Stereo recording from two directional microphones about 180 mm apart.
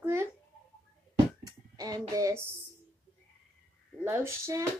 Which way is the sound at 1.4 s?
20° right (ahead or behind).